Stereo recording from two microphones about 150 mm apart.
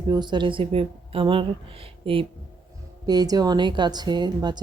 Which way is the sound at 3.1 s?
25° right (ahead or behind).